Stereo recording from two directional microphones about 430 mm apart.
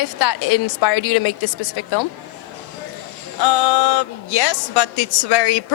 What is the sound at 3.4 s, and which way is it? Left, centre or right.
A woman's voice, left.